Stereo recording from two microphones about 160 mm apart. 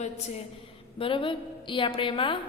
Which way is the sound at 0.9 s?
35° left (ahead or behind).